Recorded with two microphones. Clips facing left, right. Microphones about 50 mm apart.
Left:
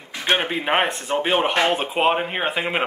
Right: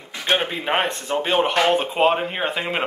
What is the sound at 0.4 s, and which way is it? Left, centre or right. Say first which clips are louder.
Speech: left 1 dB; centre.